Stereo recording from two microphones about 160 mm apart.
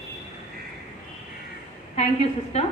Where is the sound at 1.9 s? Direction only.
40° left (ahead or behind).